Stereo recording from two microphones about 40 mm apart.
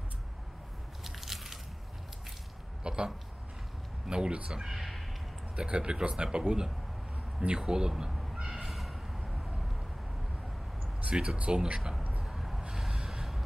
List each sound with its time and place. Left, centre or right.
1.0 s biting: centre
2.8 s a sound: right
4.1 s speech: right
4.5 s speech: centre
5.6 s speech: right
8.1 s a sound: centre
8.4 s cat: centre
11.0 s speech: right
12.2 s vehicle: centre